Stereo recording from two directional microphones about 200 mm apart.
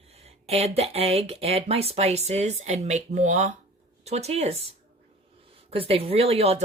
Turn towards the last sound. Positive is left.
turn(degrees=-30)  # may be behind; listen again after turning